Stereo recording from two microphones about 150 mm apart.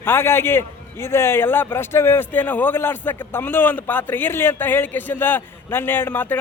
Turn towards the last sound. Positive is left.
turn(degrees=15)  # may be behind; listen again after turning